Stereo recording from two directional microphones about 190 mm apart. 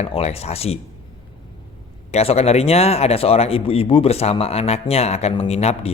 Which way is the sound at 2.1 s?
35° left (ahead or behind).